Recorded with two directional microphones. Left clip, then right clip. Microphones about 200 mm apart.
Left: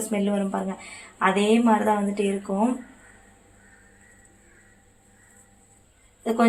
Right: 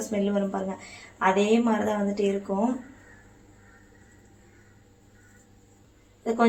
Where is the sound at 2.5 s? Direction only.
40° left (ahead or behind).